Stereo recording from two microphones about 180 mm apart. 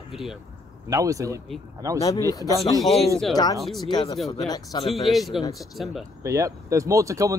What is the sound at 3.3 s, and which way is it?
Speech, 20° left (ahead or behind).